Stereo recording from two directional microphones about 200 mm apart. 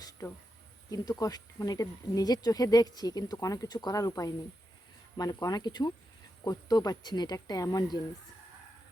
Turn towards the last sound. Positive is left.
turn(degrees=20)  # may be behind; listen again after turning